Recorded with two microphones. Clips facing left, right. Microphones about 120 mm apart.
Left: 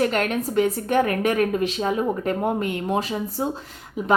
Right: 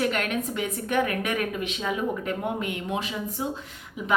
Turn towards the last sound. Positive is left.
turn(degrees=40)  # may be behind; listen again after turning